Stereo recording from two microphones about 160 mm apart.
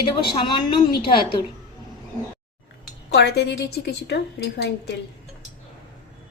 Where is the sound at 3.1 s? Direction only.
90° left.